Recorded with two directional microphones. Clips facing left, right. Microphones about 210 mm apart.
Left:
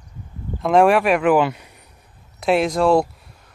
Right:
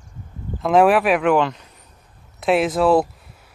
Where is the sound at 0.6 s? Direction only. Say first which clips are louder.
Even; centre (ahead or behind).